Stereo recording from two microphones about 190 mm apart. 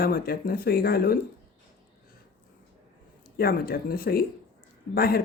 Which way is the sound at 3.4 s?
55° left (ahead or behind).